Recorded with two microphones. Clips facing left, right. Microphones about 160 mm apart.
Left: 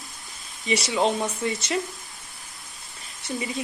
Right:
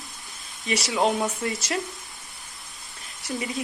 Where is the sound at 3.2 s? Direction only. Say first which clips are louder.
Even; centre (ahead or behind).